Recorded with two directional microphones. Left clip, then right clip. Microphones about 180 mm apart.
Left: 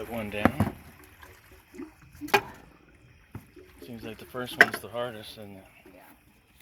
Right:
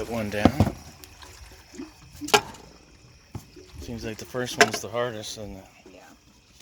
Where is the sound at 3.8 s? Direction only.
50° right (ahead or behind).